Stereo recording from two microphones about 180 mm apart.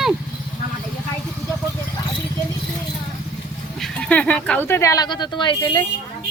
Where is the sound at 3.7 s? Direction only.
5° left (ahead or behind); by 5.8 s 25° left (ahead or behind).